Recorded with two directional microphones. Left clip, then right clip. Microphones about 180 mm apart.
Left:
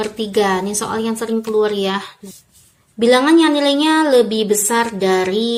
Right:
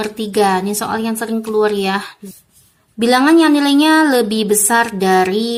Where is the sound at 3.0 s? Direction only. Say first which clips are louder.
Right 1 dB; 30° right (ahead or behind).